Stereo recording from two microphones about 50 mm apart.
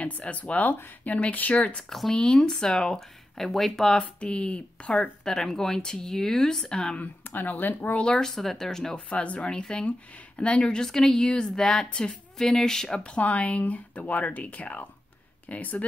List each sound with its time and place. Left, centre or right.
0.3 s speech: left
1.1 s speech: left
1.8 s speech: centre
2.1 s speech: centre
5.2 s speech: centre
7.0 s speech: left
8.0 s speech: centre
8.9 s speech: left; by 13.0 s centre
13.0 s speech: left